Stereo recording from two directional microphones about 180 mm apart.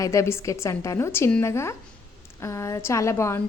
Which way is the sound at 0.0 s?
15° left (ahead or behind).